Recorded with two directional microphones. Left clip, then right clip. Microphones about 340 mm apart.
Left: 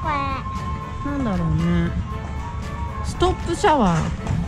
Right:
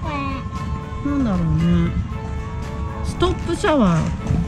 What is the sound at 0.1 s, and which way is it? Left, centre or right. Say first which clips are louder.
Music: left 2 dB; centre.